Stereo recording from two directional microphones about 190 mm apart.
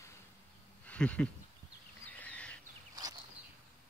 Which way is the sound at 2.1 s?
5° left (ahead or behind).